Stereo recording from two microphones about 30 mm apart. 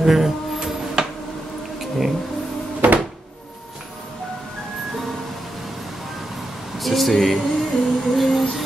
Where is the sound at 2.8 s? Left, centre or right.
Right.